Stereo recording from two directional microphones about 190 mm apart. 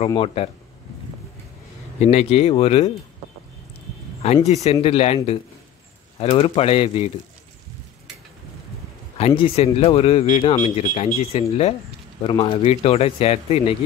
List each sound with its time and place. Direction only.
0.1 s speech: 30° left (ahead or behind)
2.0 s speech: 35° left (ahead or behind)
4.2 s speech: 35° left (ahead or behind)
9.2 s speech: 30° left (ahead or behind)